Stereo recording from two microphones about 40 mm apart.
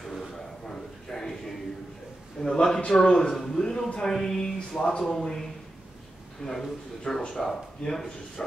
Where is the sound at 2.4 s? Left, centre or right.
Centre.